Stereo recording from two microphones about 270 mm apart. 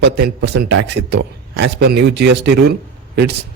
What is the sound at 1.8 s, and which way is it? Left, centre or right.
Speech, right.